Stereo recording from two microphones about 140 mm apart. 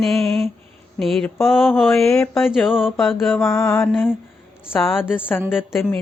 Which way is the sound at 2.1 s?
20° left (ahead or behind).